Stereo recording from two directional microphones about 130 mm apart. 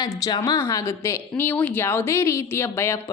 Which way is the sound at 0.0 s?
30° left (ahead or behind).